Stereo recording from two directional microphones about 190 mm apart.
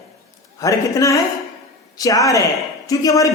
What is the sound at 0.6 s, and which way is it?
A man's voice, 15° left (ahead or behind).